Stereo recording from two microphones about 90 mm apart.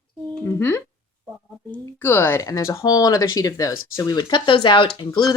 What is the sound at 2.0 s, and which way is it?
Speech, 25° left (ahead or behind).